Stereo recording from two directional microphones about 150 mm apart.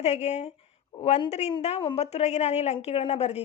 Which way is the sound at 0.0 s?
50° left (ahead or behind).